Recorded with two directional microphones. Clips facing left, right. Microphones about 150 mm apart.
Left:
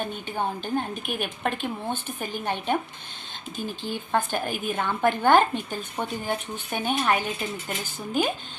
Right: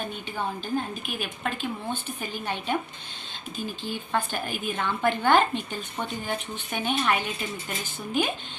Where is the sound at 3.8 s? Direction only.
50° left (ahead or behind).